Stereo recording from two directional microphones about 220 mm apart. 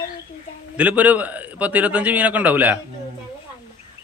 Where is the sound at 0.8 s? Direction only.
5° right (ahead or behind).